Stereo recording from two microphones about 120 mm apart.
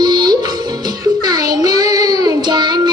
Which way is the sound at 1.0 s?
30° right (ahead or behind).